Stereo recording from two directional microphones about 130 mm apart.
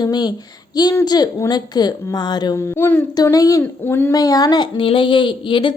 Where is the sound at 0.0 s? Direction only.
35° left (ahead or behind).